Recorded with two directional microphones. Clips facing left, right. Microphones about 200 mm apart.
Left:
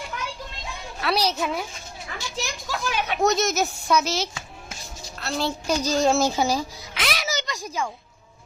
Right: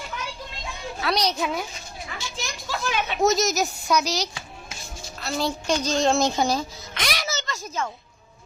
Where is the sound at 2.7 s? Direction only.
10° left (ahead or behind).